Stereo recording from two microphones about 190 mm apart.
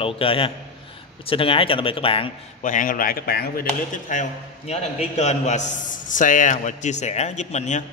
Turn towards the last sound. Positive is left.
turn(degrees=40)  # may be behind; listen again after turning